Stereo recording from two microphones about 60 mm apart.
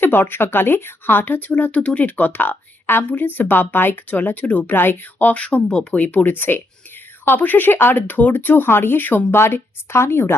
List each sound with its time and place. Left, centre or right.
0.0 s speech: left
5.3 s speech: left